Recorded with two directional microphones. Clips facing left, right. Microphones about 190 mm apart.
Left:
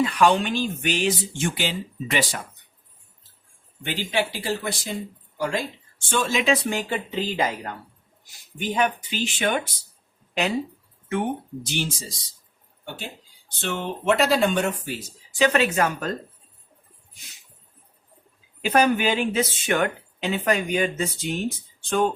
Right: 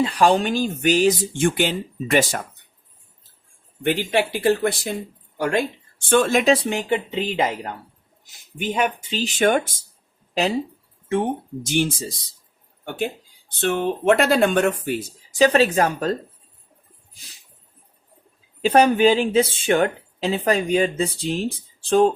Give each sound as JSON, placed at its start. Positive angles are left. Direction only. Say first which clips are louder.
{"t": 0.0, "sound": "speech", "louder": "right 2 dB", "side_deg": -30}
{"t": 3.8, "sound": "speech", "louder": "right 5 dB", "side_deg": -55}
{"t": 6.4, "sound": "speech", "louder": "right 4 dB", "side_deg": -30}
{"t": 8.7, "sound": "speech", "louder": "right 1 dB", "side_deg": -25}
{"t": 11.6, "sound": "speech", "louder": "right 11 dB", "side_deg": -50}
{"t": 13.5, "sound": "speech", "louder": "right 7 dB", "side_deg": -55}
{"t": 15.4, "sound": "speech", "louder": "right 4 dB", "side_deg": -35}
{"t": 18.6, "sound": "speech", "louder": "right 5 dB", "side_deg": -30}